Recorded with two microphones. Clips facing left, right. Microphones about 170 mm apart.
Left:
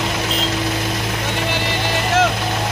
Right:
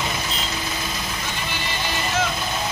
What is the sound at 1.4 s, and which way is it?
Music, 70° left (ahead or behind).